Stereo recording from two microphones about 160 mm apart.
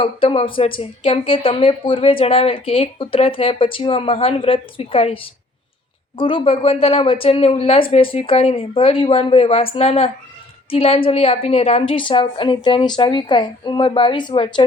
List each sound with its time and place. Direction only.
0.0 s a woman's voice: 35° left (ahead or behind)